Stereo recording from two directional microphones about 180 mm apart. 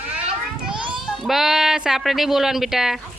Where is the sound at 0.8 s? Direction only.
Centre (ahead or behind).